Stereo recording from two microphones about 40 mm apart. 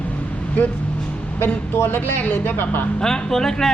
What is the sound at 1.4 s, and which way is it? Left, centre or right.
A man's voice, left.